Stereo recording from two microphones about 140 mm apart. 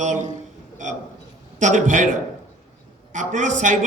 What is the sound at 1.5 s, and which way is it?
A man's voice, 60° right (ahead or behind).